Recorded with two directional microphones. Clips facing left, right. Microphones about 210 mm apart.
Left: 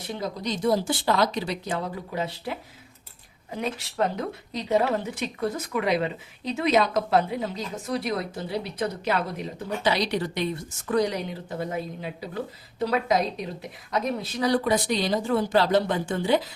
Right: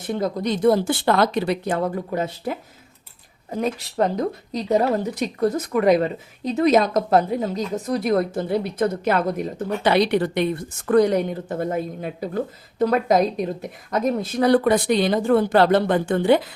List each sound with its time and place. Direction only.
0.0 s a woman's voice: 50° right (ahead or behind)